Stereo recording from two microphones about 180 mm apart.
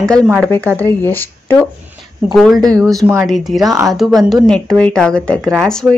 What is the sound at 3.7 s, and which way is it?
Speech, 20° right (ahead or behind).